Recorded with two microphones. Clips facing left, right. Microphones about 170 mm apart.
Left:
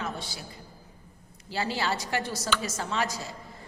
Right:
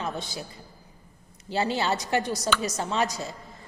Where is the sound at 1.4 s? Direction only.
20° right (ahead or behind).